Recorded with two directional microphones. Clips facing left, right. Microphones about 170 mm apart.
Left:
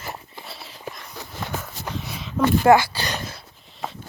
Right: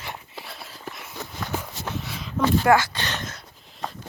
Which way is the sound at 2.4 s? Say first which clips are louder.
Left 2 dB; 10° left (ahead or behind).